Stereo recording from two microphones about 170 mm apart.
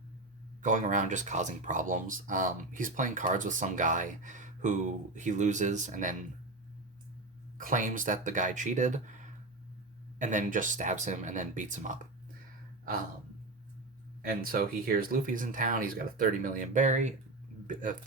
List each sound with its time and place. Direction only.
0.6 s speech: 50° right (ahead or behind)
7.6 s speech: 55° right (ahead or behind)
14.2 s speech: 60° right (ahead or behind)